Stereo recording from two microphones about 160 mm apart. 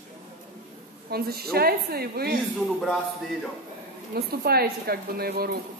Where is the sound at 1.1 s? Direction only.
75° right (ahead or behind).